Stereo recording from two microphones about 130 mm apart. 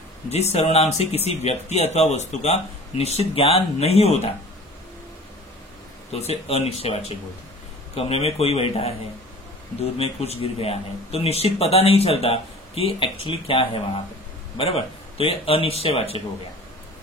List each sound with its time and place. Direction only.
0.3 s a man's voice: 55° left (ahead or behind)
6.1 s a man's voice: 50° left (ahead or behind)
9.9 s a man's voice: 50° left (ahead or behind)